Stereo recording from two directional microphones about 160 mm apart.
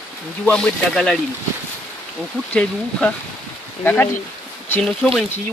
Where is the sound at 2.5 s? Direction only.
10° left (ahead or behind).